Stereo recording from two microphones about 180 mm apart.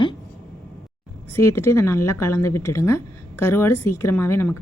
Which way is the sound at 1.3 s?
15° left (ahead or behind).